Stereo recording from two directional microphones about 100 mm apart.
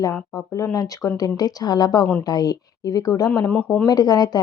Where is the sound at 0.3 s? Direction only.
35° left (ahead or behind).